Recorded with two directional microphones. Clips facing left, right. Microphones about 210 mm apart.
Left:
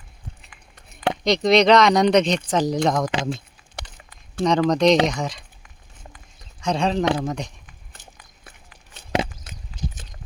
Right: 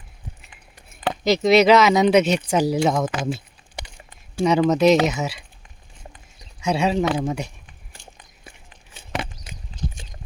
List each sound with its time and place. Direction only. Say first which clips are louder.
1.2 s speech: right 2 dB; 5° right (ahead or behind)
5.6 s stir: right 2 dB; 25° right (ahead or behind)
6.6 s speech: right 1 dB; 10° right (ahead or behind)